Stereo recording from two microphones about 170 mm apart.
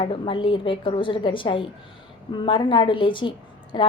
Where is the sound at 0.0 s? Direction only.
30° left (ahead or behind).